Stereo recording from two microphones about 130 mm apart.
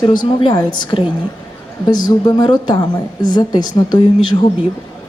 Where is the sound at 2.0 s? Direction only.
35° left (ahead or behind).